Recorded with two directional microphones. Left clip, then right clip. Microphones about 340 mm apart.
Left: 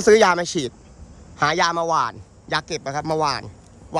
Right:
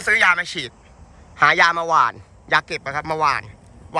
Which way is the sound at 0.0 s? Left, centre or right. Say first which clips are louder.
Left 2 dB; centre.